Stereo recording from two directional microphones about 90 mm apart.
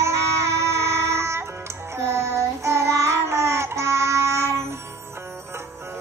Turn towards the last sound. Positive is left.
turn(degrees=-30)  # may be behind; listen again after turning